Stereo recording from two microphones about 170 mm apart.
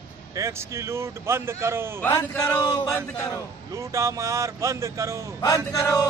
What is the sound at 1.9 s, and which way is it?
Speech, 10° left (ahead or behind).